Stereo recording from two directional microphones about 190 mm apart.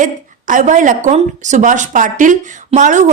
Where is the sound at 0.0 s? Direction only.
45° right (ahead or behind).